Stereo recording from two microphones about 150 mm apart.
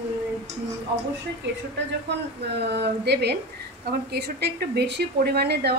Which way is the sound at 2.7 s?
90° right.